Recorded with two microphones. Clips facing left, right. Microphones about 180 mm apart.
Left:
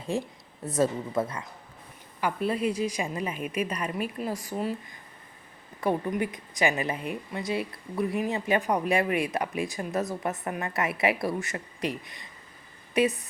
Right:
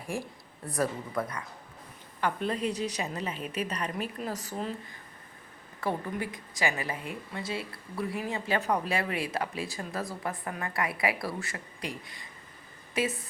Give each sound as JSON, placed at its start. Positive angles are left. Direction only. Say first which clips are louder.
{"t": 0.0, "sound": "a woman's voice", "louder": "left 5 dB", "side_deg": 20}
{"t": 2.2, "sound": "a woman's voice", "louder": "left 3 dB", "side_deg": 10}
{"t": 5.8, "sound": "a woman's voice", "louder": "left 5 dB", "side_deg": 20}